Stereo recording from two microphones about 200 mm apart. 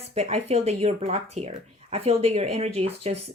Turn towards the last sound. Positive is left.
turn(degrees=-30)  # may be behind; listen again after turning